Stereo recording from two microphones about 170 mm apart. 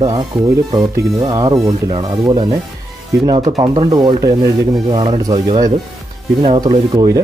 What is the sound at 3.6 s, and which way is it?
Speech, 25° right (ahead or behind).